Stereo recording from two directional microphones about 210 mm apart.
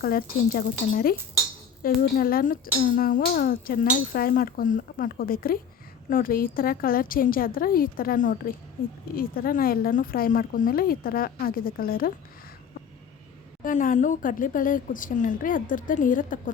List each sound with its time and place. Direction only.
0.0 s speech: 45° left (ahead or behind)
13.7 s a woman's voice: 40° left (ahead or behind)